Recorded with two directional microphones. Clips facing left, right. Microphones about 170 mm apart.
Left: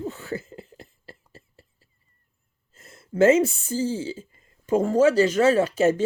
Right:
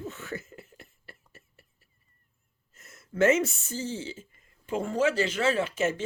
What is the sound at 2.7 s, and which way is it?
A woman's voice, 30° left (ahead or behind).